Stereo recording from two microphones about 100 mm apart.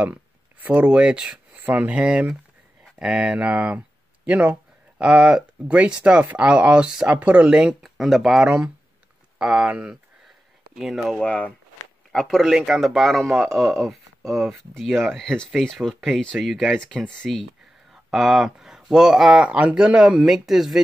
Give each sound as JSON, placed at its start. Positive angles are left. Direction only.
{"t": 0.0, "sound": "speech", "side_deg": -15}
{"t": 11.2, "sound": "speech", "side_deg": 15}
{"t": 12.1, "sound": "speech", "side_deg": 5}